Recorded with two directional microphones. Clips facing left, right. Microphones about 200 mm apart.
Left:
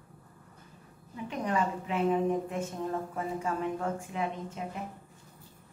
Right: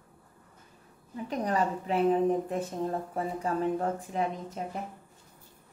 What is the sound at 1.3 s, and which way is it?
A woman's voice, 35° right (ahead or behind).